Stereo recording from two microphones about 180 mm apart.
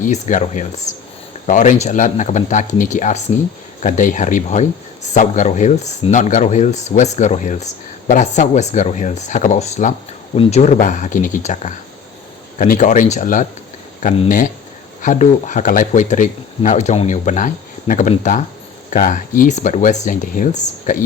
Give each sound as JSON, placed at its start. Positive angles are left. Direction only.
{"t": 0.0, "sound": "speech", "side_deg": 45}